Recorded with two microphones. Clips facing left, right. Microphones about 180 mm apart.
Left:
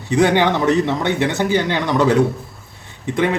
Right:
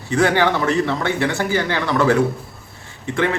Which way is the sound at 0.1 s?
20° left (ahead or behind).